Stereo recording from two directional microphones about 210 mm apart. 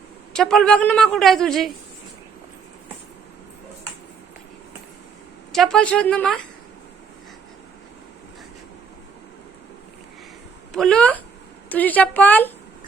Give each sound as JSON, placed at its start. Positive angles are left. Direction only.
{"t": 0.3, "sound": "a woman's voice", "side_deg": 5}
{"t": 5.5, "sound": "a woman's voice", "side_deg": 0}
{"t": 10.7, "sound": "a woman's voice", "side_deg": 5}